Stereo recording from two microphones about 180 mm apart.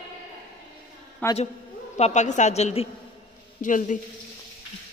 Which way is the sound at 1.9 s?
40° left (ahead or behind).